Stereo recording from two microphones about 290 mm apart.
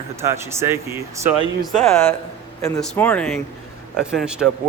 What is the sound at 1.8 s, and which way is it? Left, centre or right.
Speech, centre.